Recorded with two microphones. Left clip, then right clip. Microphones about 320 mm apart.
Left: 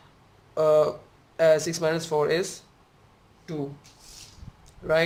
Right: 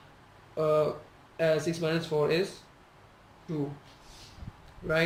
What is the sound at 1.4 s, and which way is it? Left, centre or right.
A man's voice, centre.